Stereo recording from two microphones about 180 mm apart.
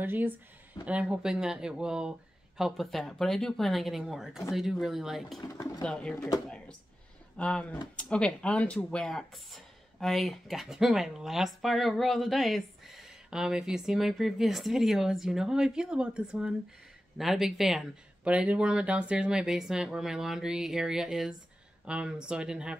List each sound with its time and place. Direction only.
0.0 s speech: 10° right (ahead or behind)
5.5 s speech: 20° left (ahead or behind)
5.9 s speech: 5° left (ahead or behind)
7.3 s speech: 5° left (ahead or behind)